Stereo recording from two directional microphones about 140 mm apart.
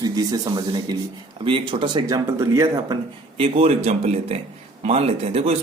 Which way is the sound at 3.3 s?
45° right (ahead or behind).